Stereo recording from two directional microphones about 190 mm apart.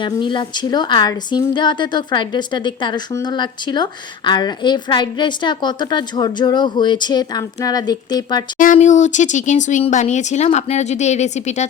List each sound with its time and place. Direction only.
0.0 s speech: 25° left (ahead or behind)
8.5 s speech: 45° left (ahead or behind)